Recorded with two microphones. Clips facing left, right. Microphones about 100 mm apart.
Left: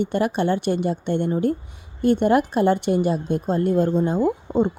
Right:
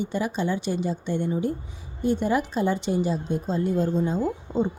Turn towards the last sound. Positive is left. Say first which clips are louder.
# left 5 dB
turn(degrees=60)  # may be behind; listen again after turning